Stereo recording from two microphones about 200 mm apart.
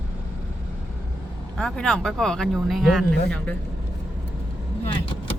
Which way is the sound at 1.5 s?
5° left (ahead or behind).